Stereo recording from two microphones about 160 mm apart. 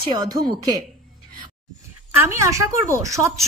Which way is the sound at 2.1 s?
15° right (ahead or behind).